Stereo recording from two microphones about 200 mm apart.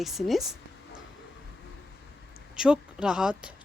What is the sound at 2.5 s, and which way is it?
Speech, 5° right (ahead or behind).